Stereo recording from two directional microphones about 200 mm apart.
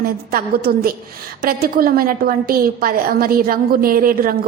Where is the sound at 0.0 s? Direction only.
50° right (ahead or behind).